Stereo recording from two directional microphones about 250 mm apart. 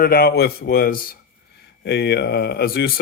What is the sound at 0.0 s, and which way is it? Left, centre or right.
Speech, left.